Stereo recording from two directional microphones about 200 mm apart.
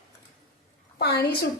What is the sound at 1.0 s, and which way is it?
Speech, 55° left (ahead or behind).